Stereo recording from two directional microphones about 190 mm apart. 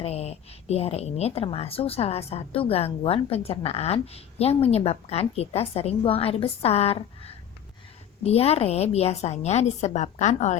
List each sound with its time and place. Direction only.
0.0 s a woman's voice: 35° left (ahead or behind)